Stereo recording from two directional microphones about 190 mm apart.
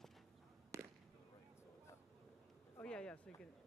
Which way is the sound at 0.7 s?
15° right (ahead or behind).